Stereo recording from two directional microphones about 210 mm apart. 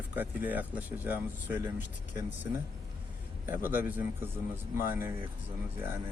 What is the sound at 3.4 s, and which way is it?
Speech, 10° right (ahead or behind).